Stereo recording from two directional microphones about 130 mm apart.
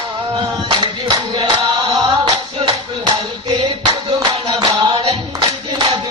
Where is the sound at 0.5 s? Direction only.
30° right (ahead or behind).